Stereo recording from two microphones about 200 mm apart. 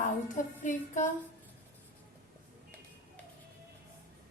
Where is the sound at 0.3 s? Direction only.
40° left (ahead or behind).